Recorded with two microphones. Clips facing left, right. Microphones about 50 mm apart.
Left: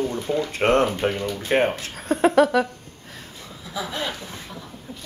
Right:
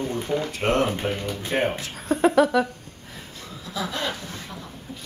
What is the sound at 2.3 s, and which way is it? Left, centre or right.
Speech, centre.